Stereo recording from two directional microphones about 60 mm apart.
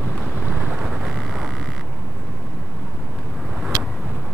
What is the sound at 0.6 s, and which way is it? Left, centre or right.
Boat, centre.